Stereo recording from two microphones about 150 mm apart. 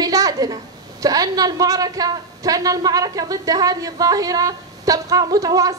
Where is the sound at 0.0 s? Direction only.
25° right (ahead or behind).